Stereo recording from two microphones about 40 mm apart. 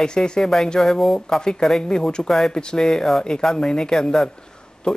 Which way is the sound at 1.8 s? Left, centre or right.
Centre.